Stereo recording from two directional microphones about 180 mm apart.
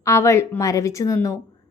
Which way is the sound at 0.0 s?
15° left (ahead or behind).